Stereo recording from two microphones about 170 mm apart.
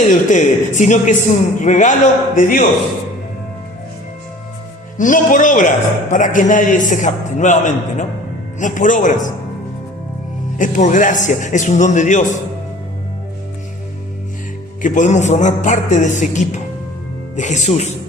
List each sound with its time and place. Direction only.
0.1 s a man's voice: 45° left (ahead or behind)
4.9 s a man's voice: 50° left (ahead or behind)
10.6 s a man's voice: 45° left (ahead or behind)
14.8 s a man's voice: 50° left (ahead or behind)